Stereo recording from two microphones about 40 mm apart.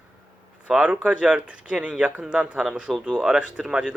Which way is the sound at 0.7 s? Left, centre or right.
Centre.